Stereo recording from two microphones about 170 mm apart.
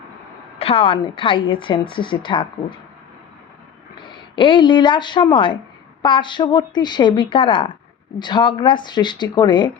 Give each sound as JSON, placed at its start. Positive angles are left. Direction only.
{"t": 0.6, "sound": "a woman's voice", "side_deg": 35}
{"t": 3.9, "sound": "a woman's voice", "side_deg": 30}